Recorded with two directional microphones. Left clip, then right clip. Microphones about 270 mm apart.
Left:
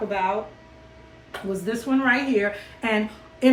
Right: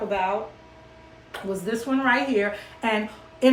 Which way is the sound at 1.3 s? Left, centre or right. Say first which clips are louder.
Even; centre.